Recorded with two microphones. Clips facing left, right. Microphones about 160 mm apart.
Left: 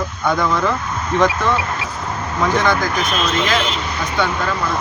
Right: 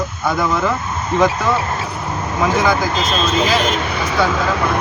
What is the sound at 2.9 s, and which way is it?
Speech, 25° right (ahead or behind).